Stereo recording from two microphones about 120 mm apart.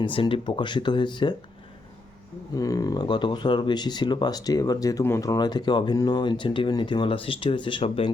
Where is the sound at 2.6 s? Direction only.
30° left (ahead or behind).